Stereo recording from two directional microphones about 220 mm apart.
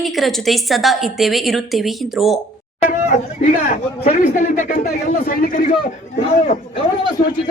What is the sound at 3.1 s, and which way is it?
A man's voice, 35° left (ahead or behind).